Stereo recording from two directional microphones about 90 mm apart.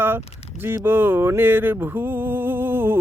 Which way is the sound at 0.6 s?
25° right (ahead or behind).